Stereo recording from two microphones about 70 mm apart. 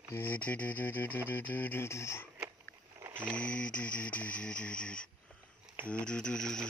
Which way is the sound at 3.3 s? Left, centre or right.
Centre.